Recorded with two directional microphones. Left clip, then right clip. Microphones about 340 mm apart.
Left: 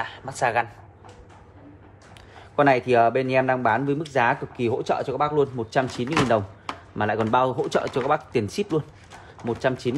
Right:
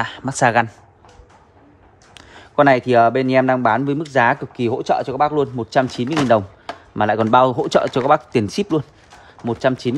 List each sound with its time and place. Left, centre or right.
0.0 s speech: right
2.1 s speech: right